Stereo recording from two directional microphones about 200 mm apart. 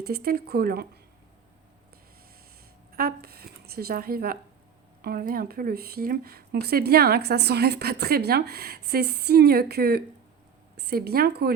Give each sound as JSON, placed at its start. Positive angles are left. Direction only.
{"t": 0.0, "sound": "speech", "side_deg": -50}
{"t": 2.9, "sound": "a woman's voice", "side_deg": -50}